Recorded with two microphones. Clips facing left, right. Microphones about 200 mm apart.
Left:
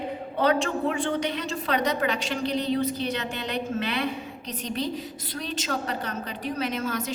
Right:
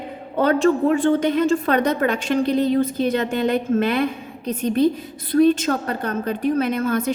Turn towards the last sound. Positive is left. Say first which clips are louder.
# right 8 dB
turn(degrees=-55)  # may be behind; listen again after turning